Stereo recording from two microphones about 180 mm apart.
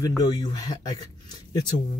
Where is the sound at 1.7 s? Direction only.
40° left (ahead or behind).